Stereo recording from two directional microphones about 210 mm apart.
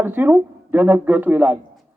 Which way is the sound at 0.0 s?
10° right (ahead or behind).